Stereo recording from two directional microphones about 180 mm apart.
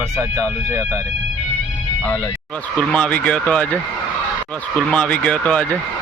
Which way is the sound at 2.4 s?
5° left (ahead or behind).